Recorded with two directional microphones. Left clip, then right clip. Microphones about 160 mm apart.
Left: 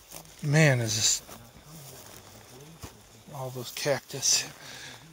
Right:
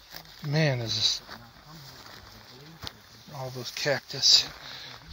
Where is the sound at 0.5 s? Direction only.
45° left (ahead or behind).